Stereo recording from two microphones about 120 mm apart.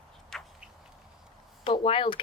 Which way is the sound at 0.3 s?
5° left (ahead or behind).